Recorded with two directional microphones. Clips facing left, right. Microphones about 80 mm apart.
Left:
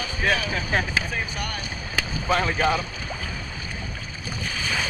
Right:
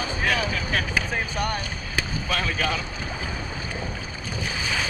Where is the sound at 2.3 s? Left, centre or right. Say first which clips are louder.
Left 6 dB; left.